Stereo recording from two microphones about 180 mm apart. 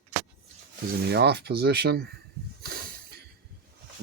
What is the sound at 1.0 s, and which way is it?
Speech, 65° right (ahead or behind).